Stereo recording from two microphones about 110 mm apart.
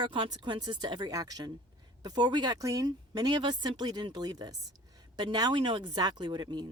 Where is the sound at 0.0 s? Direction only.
50° right (ahead or behind).